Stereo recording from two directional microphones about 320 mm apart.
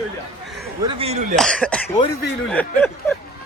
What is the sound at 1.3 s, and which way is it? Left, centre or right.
Speech, centre.